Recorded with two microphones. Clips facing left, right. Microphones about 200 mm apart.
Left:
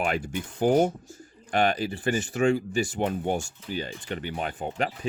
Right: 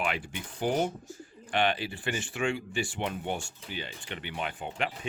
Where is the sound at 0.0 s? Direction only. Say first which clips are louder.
Left 5 dB; 45° left (ahead or behind).